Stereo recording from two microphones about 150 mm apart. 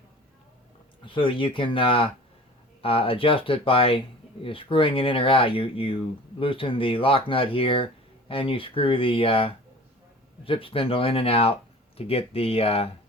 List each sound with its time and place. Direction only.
1.0 s speech: 35° left (ahead or behind)